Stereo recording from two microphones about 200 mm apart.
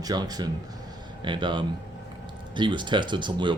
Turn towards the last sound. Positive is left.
turn(degrees=-25)  # may be behind; listen again after turning